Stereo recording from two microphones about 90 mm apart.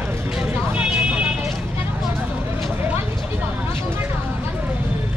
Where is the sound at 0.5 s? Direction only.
15° right (ahead or behind).